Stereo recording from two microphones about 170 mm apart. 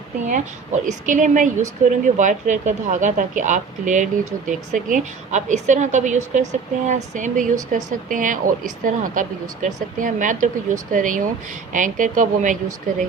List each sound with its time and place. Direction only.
0.3 s speech: 45° right (ahead or behind)